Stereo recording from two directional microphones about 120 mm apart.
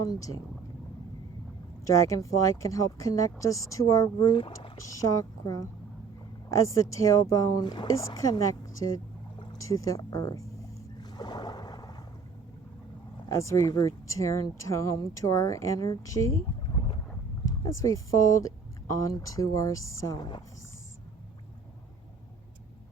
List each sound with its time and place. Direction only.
0.0 s speech: 30° left (ahead or behind)
1.8 s speech: 25° left (ahead or behind); by 4.8 s 45° left (ahead or behind)
4.9 s speech: 30° left (ahead or behind)
9.4 s speech: 30° left (ahead or behind)
11.0 s boat: 35° left (ahead or behind)
13.2 s speech: 25° left (ahead or behind)
16.6 s boat: 45° left (ahead or behind)
17.6 s speech: 30° left (ahead or behind)